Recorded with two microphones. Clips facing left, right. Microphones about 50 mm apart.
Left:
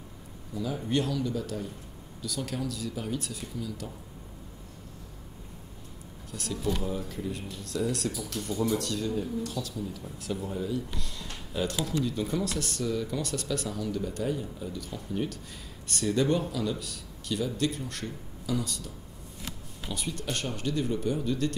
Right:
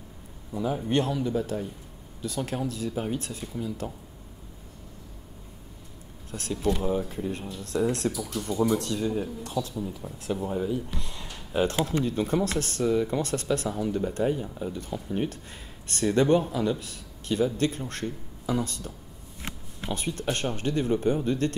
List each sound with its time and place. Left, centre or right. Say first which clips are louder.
0.5 s speech: right 3 dB; right
6.3 s speech: right 4 dB; right
8.2 s speech: right 3 dB; centre
8.5 s speech: right 4 dB; right